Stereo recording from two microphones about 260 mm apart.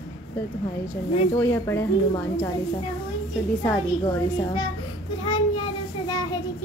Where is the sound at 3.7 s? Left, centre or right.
Centre.